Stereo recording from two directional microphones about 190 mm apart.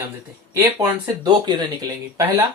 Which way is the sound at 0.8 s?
20° right (ahead or behind).